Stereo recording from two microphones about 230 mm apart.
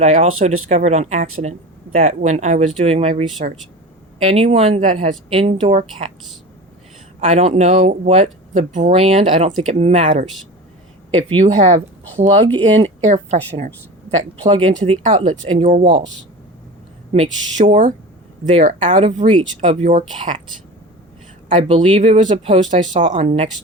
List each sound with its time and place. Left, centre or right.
0.0 s speech: right
7.2 s speech: right
12.8 s speech: right
14.4 s speech: right
17.2 s speech: right
21.5 s speech: right